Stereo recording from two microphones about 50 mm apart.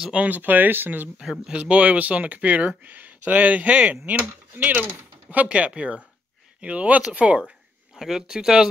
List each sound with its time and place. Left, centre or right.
0.1 s speech: right
0.4 s speech: right
1.2 s speech: centre
1.5 s speech: right
7.9 s speech: centre